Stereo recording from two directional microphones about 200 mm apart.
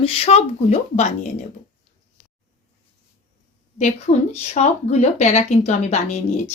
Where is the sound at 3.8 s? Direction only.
35° left (ahead or behind).